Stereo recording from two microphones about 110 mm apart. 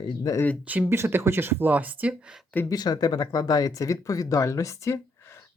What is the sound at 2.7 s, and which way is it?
Speech, 40° left (ahead or behind).